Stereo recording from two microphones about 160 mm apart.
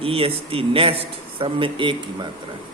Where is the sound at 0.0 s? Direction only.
35° right (ahead or behind).